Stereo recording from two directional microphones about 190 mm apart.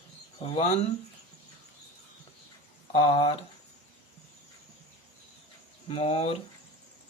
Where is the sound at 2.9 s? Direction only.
30° left (ahead or behind).